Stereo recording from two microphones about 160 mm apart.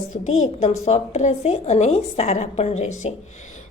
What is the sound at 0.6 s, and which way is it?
A woman's voice, 45° left (ahead or behind).